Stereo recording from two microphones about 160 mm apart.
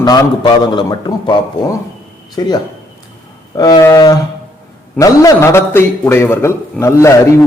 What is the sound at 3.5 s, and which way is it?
A man's voice, 25° left (ahead or behind).